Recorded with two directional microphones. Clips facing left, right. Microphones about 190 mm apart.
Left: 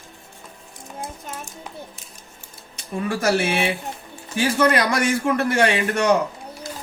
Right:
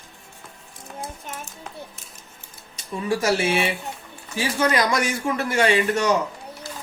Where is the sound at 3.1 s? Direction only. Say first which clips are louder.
Even; 55° left (ahead or behind).